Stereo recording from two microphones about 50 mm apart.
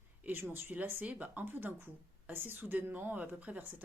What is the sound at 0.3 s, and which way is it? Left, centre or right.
A woman's voice, right.